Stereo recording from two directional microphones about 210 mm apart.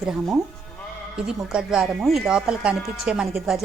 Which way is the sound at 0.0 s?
Centre (ahead or behind).